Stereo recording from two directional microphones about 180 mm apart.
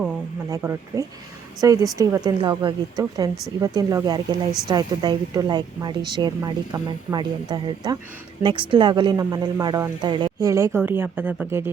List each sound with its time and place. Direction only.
0.5 s speech: 15° right (ahead or behind)